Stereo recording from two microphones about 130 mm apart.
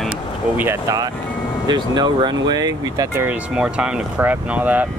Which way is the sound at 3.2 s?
10° right (ahead or behind).